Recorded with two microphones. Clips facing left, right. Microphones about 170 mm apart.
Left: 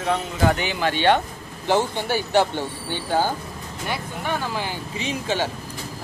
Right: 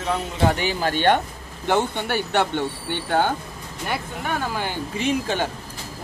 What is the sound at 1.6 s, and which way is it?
Speech, 60° right (ahead or behind).